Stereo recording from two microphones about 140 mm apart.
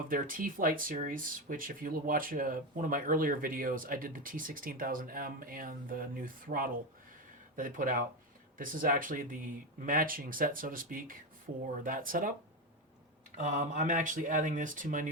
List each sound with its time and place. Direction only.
0.1 s speech: 85° right
7.5 s speech: 75° right (ahead or behind)
13.3 s speech: 65° right (ahead or behind)